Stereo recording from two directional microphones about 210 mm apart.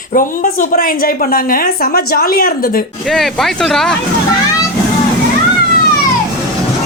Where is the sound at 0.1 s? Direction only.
40° left (ahead or behind).